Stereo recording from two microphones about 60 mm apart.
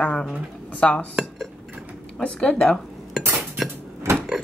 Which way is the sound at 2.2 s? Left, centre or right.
Centre.